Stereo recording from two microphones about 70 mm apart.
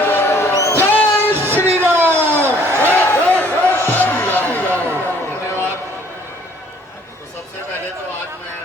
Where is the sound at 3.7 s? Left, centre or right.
Left.